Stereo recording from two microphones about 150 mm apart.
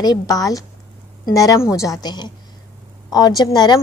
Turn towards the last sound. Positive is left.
turn(degrees=25)  # may be behind; listen again after turning